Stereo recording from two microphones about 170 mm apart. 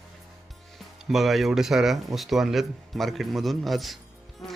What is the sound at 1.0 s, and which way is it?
Speech, centre (ahead or behind).